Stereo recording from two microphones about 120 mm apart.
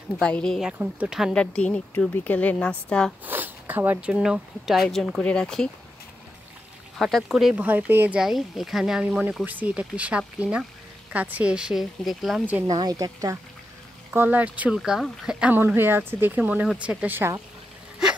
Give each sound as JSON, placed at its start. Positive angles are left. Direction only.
{"t": 0.2, "sound": "a woman's voice", "side_deg": 5}
{"t": 0.7, "sound": "speech", "side_deg": -15}
{"t": 1.3, "sound": "a woman's voice", "side_deg": 10}
{"t": 3.3, "sound": "speech", "side_deg": -15}
{"t": 4.1, "sound": "a woman's voice", "side_deg": -5}
{"t": 7.0, "sound": "speech", "side_deg": 0}
{"t": 7.5, "sound": "speech", "side_deg": -15}
{"t": 8.2, "sound": "speech", "side_deg": 0}
{"t": 12.6, "sound": "speech", "side_deg": -35}
{"t": 14.1, "sound": "speech", "side_deg": -15}